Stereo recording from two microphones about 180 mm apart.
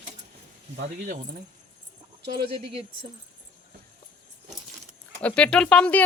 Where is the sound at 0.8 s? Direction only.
45° right (ahead or behind).